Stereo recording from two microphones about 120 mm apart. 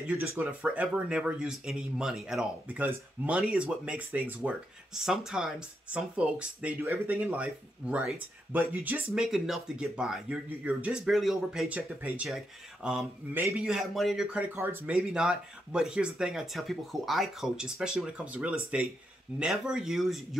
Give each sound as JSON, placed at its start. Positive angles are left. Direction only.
{"t": 0.4, "sound": "speech", "side_deg": -10}
{"t": 14.5, "sound": "speech", "side_deg": -15}
{"t": 15.0, "sound": "speech", "side_deg": -5}